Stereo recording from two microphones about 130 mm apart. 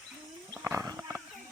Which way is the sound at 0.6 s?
15° right (ahead or behind).